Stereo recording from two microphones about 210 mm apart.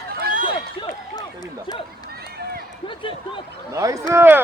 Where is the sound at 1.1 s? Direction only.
20° left (ahead or behind).